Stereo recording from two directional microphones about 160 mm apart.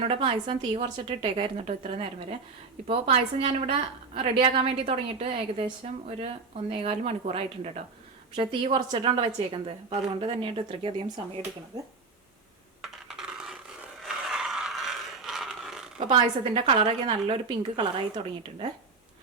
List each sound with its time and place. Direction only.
0.0 s a woman's voice: 35° right (ahead or behind)
12.8 s coin: 5° right (ahead or behind)
14.0 s a sound: 5° right (ahead or behind)
16.0 s a woman's voice: 30° right (ahead or behind)